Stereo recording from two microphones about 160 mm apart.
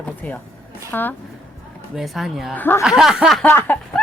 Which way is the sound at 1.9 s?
Centre (ahead or behind).